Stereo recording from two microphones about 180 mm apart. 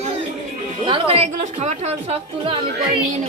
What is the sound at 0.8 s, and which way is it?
A woman's voice, 30° right (ahead or behind).